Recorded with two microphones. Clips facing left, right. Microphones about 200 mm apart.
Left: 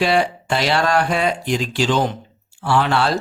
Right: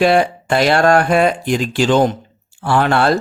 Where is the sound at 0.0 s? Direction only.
55° right (ahead or behind).